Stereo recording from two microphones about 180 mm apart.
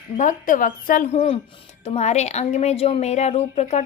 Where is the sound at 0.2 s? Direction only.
45° left (ahead or behind).